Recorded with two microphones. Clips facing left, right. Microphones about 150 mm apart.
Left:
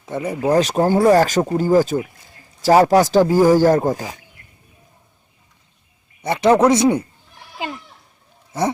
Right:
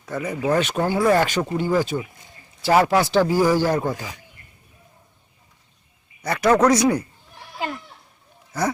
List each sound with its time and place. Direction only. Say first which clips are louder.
0.0 s speech: left 3 dB; 25° left (ahead or behind)
6.2 s a man's voice: left 3 dB; 25° left (ahead or behind)
8.5 s a man's voice: left 3 dB; 25° left (ahead or behind)